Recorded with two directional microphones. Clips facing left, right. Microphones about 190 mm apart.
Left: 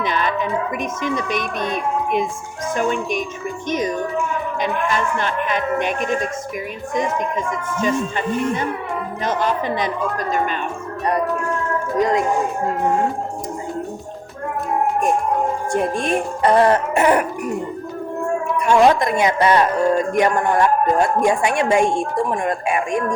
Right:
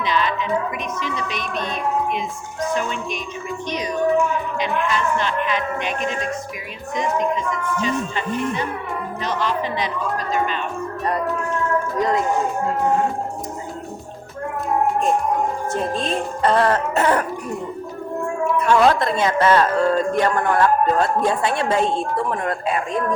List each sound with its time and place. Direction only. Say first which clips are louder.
0.0 s music: left 1 dB; 50° left (ahead or behind)
0.9 s speech: left 5 dB; 50° left (ahead or behind)
7.8 s speech: left 7 dB; 50° left (ahead or behind)
11.9 s speech: left 4 dB; 20° left (ahead or behind)
16.0 s speech: left 1 dB; 15° left (ahead or behind)
18.7 s speech: left 3 dB; 15° left (ahead or behind)